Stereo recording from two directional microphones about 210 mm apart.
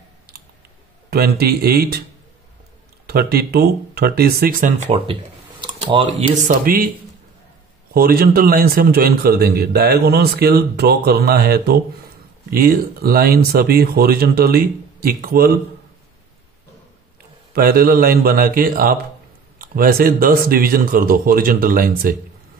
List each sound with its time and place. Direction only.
1.1 s a man's voice: 50° right (ahead or behind)
3.1 s a man's voice: 50° right (ahead or behind)
5.6 s computer keyboard: 25° right (ahead or behind)
6.4 s a man's voice: 45° right (ahead or behind)
7.9 s a man's voice: 45° right (ahead or behind)
17.5 s a man's voice: 45° right (ahead or behind)